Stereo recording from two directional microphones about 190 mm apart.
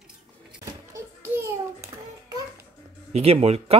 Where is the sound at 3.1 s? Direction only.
35° right (ahead or behind).